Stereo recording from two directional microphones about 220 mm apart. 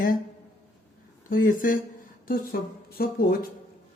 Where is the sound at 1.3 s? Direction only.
40° left (ahead or behind).